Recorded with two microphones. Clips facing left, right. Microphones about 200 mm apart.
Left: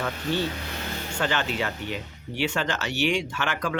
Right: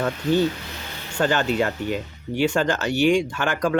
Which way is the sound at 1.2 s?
40° right (ahead or behind).